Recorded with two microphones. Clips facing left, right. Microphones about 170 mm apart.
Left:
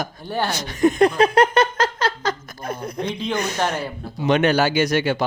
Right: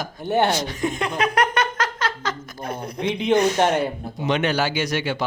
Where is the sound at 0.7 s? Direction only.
40° left (ahead or behind).